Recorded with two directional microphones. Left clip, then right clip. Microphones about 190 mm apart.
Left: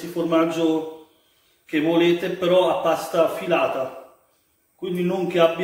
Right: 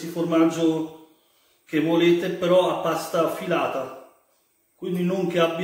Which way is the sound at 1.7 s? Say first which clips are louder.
Left 1 dB; 15° right (ahead or behind).